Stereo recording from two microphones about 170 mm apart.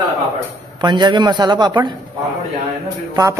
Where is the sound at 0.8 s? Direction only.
25° right (ahead or behind).